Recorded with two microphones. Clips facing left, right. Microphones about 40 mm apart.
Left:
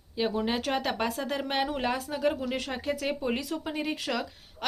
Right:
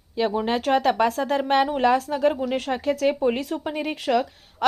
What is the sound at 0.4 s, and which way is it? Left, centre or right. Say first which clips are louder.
A woman's voice: right 8 dB; right.